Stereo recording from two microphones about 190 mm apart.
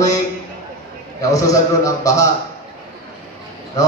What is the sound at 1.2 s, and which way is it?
A man's voice, 15° left (ahead or behind).